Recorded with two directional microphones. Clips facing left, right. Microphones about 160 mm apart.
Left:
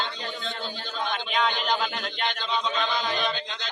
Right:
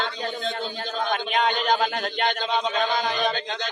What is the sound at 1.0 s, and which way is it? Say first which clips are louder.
Chant: right 3 dB; 45° right (ahead or behind).